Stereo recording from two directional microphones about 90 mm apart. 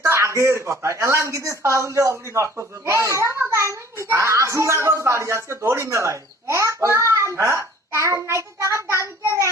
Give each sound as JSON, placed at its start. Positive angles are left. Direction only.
{"t": 0.0, "sound": "a child's voice", "side_deg": -30}